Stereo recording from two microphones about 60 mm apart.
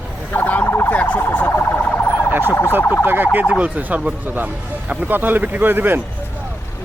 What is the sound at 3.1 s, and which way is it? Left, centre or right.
Speech, right.